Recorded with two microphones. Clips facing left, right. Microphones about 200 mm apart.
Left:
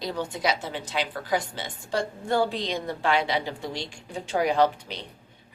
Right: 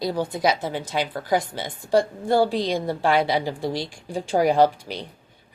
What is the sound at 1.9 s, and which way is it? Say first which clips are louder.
Speech: right 6 dB; 35° right (ahead or behind).